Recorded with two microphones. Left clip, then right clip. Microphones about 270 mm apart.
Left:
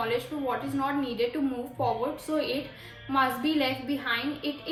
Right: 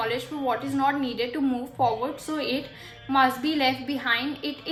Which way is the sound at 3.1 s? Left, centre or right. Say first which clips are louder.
Right 4 dB; right.